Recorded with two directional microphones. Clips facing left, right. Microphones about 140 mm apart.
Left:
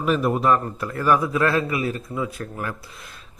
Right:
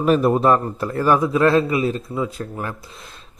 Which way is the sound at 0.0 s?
35° right (ahead or behind).